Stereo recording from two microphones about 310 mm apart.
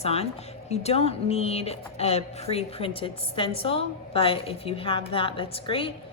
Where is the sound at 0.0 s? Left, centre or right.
Centre.